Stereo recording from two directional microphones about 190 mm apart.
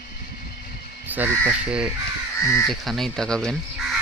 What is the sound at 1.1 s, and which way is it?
Speech, 10° right (ahead or behind).